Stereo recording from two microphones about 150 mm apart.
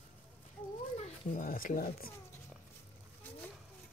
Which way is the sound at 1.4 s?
70° left (ahead or behind).